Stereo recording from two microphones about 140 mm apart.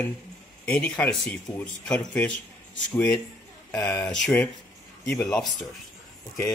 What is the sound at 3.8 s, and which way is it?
Speech, 5° left (ahead or behind).